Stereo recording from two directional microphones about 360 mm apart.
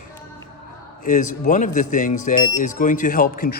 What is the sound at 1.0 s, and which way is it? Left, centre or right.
A man's voice, left.